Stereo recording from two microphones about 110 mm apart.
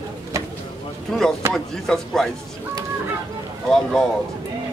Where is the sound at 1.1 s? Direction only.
5° left (ahead or behind).